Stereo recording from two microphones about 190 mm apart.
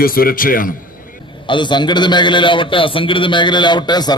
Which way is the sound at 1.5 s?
25° left (ahead or behind).